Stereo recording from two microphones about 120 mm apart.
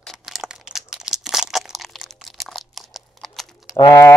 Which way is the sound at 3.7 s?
25° left (ahead or behind).